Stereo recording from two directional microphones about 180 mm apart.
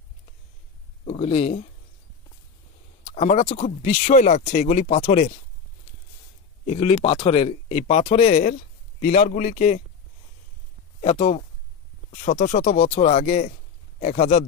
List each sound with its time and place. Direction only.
1.0 s speech: 35° left (ahead or behind)
3.1 s speech: 40° left (ahead or behind)
6.7 s speech: 35° left (ahead or behind)
11.0 s a man's voice: 45° left (ahead or behind)